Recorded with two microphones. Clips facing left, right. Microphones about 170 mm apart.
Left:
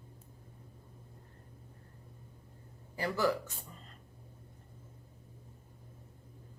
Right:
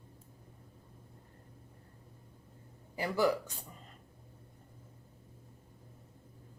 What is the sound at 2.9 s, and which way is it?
Speech, 15° right (ahead or behind).